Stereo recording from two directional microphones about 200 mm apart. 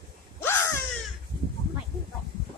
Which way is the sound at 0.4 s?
10° left (ahead or behind).